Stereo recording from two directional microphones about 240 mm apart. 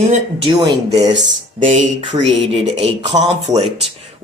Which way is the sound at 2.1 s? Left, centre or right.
Centre.